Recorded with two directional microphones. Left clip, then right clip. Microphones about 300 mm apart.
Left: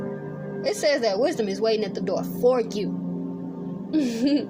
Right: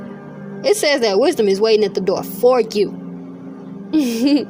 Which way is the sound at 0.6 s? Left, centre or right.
Right.